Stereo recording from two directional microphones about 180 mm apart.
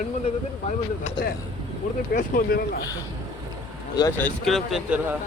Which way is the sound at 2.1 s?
55° left (ahead or behind).